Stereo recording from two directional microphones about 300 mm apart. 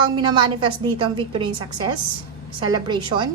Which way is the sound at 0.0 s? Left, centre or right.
Centre.